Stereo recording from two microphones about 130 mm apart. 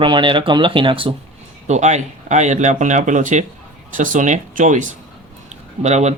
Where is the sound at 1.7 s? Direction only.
60° right (ahead or behind).